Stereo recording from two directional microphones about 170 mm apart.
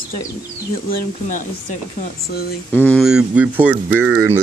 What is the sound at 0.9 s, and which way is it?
Speech, 55° left (ahead or behind).